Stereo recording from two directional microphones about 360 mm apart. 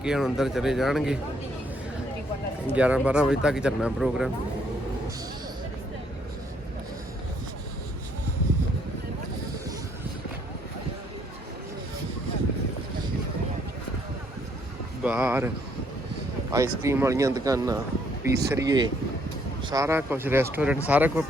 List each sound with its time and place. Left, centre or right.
0.0 s speech: centre
2.7 s speech: centre
15.0 s speech: centre
16.5 s speech: centre